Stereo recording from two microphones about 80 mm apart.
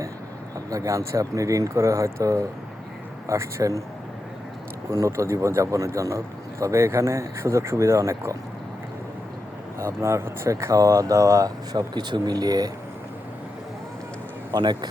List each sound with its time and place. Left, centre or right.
0.7 s a man's voice: right
4.9 s a man's voice: right
9.7 s a man's voice: right
10.5 s speech: right
14.5 s speech: right